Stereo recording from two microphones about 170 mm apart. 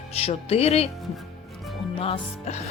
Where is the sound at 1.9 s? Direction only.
35° left (ahead or behind).